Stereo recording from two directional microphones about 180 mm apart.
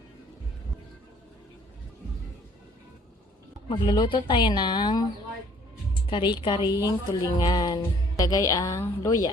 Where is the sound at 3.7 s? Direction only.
25° left (ahead or behind).